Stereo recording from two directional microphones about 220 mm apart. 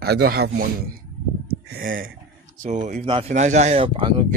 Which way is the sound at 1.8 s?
40° right (ahead or behind).